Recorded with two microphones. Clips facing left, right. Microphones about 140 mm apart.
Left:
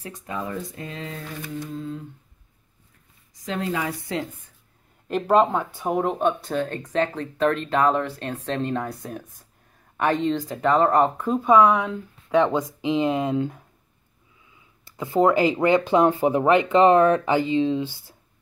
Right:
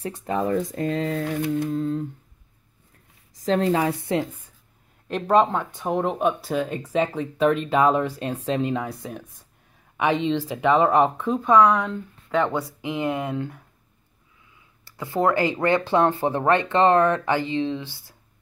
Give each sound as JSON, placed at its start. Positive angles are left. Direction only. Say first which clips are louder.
{"t": 0.0, "sound": "speech", "louder": "right 7 dB", "side_deg": -30}
{"t": 0.7, "sound": "speech", "louder": "right 10 dB", "side_deg": -45}
{"t": 1.1, "sound": "mantra", "louder": "right 9 dB", "side_deg": -60}
{"t": 3.4, "sound": "speech", "louder": "right 6 dB", "side_deg": -35}
{"t": 4.0, "sound": "speech", "louder": "right 4 dB", "side_deg": -20}
{"t": 5.0, "sound": "speech", "louder": "even", "side_deg": 5}
{"t": 6.1, "sound": "speech", "louder": "even", "side_deg": -5}
{"t": 14.9, "sound": "speech", "louder": "left 3 dB", "side_deg": 20}